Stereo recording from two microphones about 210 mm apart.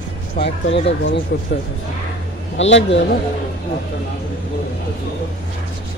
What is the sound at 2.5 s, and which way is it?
Speech, 60° left (ahead or behind).